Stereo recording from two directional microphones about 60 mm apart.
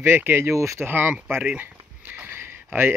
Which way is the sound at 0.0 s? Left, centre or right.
Right.